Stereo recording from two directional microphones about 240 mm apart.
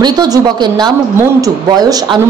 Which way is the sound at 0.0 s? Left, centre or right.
Centre.